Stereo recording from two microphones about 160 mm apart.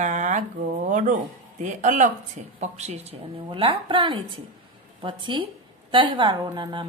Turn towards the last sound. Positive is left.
turn(degrees=-30)  # may be behind; listen again after turning